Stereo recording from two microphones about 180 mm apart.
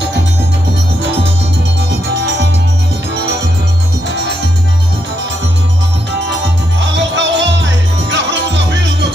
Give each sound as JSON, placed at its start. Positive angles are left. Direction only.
{"t": 6.8, "sound": "music", "side_deg": -90}